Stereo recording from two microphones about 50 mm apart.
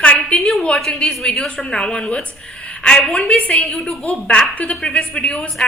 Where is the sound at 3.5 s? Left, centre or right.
Left.